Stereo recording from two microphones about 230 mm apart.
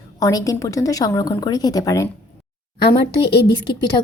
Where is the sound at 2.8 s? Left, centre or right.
Left.